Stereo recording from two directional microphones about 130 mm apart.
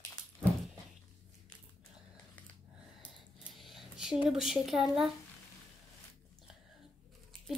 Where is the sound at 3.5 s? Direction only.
Centre (ahead or behind).